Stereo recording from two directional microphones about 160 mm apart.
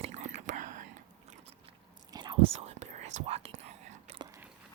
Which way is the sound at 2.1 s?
30° right (ahead or behind).